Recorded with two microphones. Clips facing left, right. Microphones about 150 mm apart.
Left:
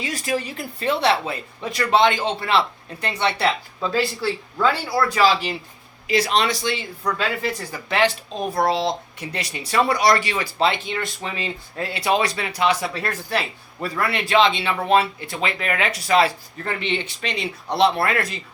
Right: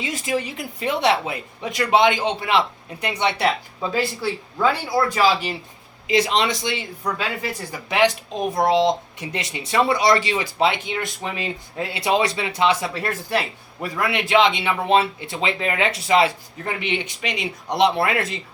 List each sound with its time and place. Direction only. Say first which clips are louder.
0.0 s speech: right 1 dB; 20° right (ahead or behind)
6.1 s speech: right 1 dB; 20° right (ahead or behind)